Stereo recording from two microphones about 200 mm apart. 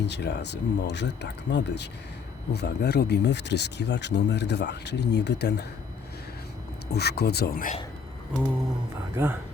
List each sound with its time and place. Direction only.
0.0 s speech: 60° left (ahead or behind)
6.9 s speech: 55° left (ahead or behind)
9.1 s speech: 10° right (ahead or behind)